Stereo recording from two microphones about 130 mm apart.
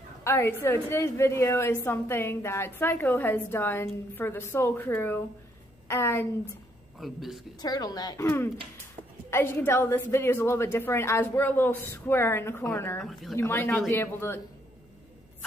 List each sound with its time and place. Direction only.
0.2 s a woman's voice: 20° left (ahead or behind)
7.0 s speech: centre (ahead or behind)
7.6 s a woman's voice: 30° left (ahead or behind)
13.0 s speech: centre (ahead or behind)
13.4 s a woman's voice: 20° left (ahead or behind)